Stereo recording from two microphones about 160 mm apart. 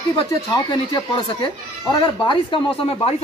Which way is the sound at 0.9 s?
30° left (ahead or behind).